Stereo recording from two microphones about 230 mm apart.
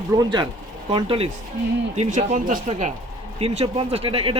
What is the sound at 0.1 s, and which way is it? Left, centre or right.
Speech, centre.